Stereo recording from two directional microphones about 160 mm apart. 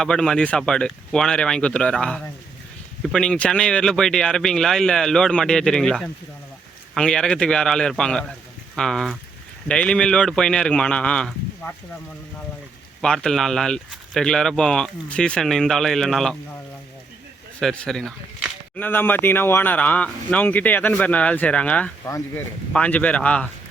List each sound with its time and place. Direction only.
0.0 s speech: 5° left (ahead or behind)
13.0 s speech: 5° left (ahead or behind)
17.6 s a man's voice: 5° left (ahead or behind)
22.0 s speech: 20° left (ahead or behind)
22.7 s a man's voice: 10° left (ahead or behind)